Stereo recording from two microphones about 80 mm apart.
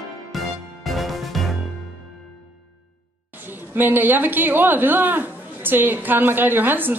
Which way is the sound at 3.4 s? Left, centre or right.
Right.